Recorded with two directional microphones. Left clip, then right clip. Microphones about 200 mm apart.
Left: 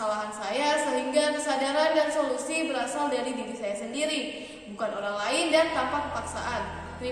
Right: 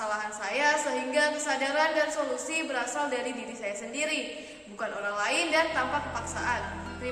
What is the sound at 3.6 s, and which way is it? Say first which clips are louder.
A woman's voice: left 2 dB; centre (ahead or behind).